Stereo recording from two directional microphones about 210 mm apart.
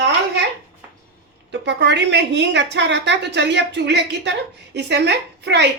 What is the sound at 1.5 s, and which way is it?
A woman's voice, 55° right (ahead or behind).